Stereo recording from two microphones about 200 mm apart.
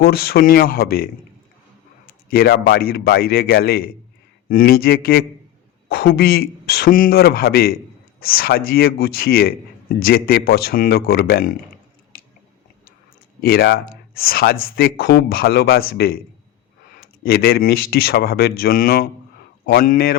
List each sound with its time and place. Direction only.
0.0 s speech: 50° left (ahead or behind)
2.3 s speech: 50° left (ahead or behind)
13.4 s speech: 50° left (ahead or behind)